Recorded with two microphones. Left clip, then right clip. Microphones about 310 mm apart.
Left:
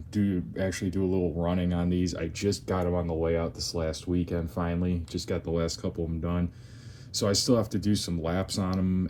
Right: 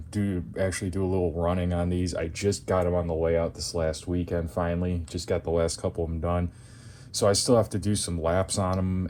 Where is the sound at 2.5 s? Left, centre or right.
Centre.